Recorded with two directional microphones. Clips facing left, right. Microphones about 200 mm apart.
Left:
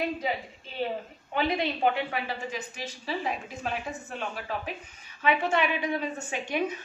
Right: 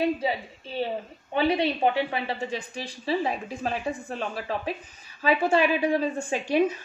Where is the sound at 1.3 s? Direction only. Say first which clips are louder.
Right 4 dB; 30° right (ahead or behind).